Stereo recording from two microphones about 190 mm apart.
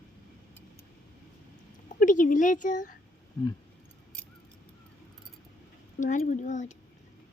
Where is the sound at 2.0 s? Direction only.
45° left (ahead or behind).